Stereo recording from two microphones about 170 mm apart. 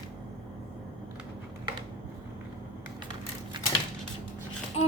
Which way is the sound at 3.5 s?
30° right (ahead or behind).